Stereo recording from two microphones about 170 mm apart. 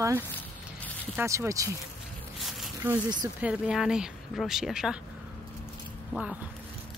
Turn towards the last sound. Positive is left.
turn(degrees=-5)  # may be behind; listen again after turning